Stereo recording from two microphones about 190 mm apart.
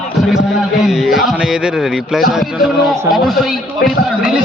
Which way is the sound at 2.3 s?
Centre (ahead or behind).